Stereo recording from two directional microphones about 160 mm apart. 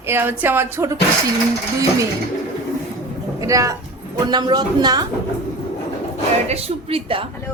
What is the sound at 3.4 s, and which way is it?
A woman's voice, 20° right (ahead or behind).